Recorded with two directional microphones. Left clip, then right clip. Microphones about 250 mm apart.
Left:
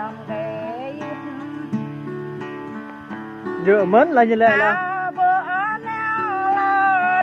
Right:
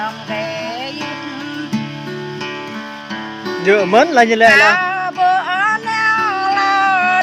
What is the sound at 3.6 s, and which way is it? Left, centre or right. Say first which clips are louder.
Music: right 3 dB; centre.